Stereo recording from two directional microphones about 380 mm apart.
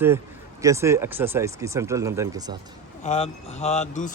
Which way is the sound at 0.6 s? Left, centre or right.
Centre.